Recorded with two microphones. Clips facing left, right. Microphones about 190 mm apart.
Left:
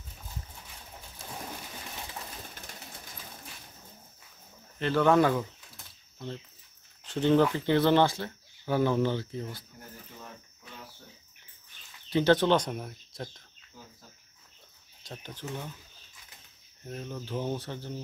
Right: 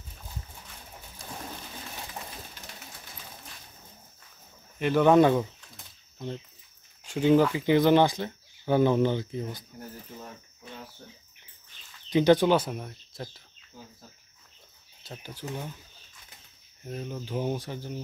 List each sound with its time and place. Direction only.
4.7 s speech: 15° right (ahead or behind)
12.1 s speech: 15° right (ahead or behind)
15.0 s speech: 10° right (ahead or behind)
16.8 s speech: 10° right (ahead or behind)